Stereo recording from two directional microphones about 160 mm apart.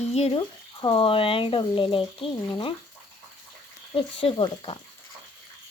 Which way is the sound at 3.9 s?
35° left (ahead or behind).